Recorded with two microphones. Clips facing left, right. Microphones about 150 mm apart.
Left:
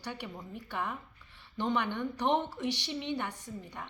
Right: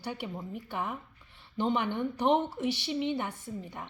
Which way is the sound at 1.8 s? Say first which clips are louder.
Right 2 dB; 10° right (ahead or behind).